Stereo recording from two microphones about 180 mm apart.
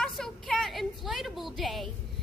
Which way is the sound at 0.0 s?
5° left (ahead or behind).